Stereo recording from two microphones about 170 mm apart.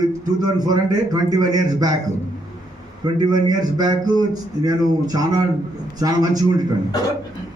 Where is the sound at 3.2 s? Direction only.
25° right (ahead or behind).